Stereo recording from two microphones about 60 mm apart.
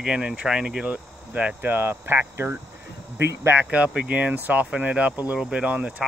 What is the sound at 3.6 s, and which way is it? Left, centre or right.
Speech, right.